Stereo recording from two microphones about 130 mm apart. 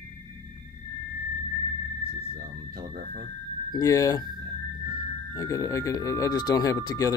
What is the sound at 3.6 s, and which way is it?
Speech, 25° left (ahead or behind).